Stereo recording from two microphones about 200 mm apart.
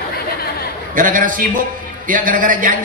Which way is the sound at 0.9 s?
40° right (ahead or behind).